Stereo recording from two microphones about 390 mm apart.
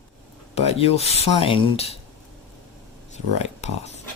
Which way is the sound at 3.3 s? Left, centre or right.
Centre.